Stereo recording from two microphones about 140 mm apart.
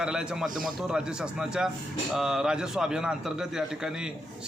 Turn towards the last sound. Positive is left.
turn(degrees=-5)  # may be behind; listen again after turning